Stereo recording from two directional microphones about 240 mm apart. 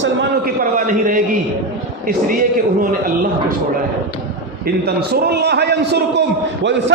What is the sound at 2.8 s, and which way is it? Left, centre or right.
Speech, right.